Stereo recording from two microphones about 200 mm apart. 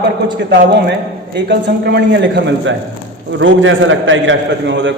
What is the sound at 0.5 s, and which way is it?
A man's voice, 60° right (ahead or behind).